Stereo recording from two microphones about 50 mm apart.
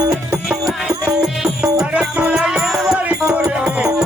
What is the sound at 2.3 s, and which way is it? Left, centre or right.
Music, centre.